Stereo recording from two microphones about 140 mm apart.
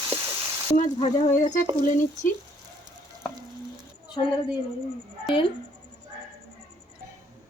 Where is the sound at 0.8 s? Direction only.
50° left (ahead or behind).